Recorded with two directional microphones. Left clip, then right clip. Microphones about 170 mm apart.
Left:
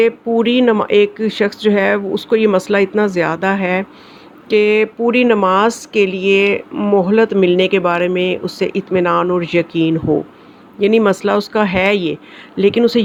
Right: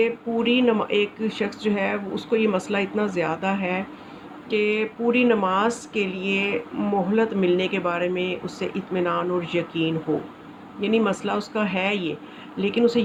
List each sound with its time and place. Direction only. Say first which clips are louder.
0.0 s speech: left 9 dB; 45° left (ahead or behind)